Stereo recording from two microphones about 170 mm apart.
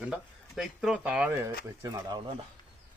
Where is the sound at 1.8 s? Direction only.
25° right (ahead or behind).